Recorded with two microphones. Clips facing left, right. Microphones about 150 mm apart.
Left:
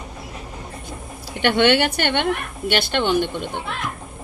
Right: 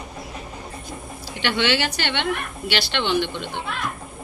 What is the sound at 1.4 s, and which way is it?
A woman's voice, 55° left (ahead or behind).